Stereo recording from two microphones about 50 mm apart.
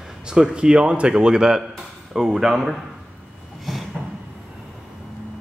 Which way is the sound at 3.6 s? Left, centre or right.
Centre.